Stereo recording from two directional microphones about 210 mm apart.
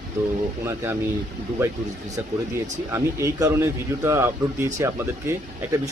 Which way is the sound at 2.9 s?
15° right (ahead or behind).